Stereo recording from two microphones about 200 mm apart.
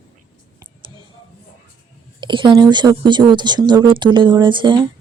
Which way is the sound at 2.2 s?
25° right (ahead or behind).